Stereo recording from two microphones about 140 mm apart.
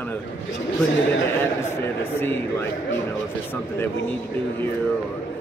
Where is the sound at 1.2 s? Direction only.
15° left (ahead or behind).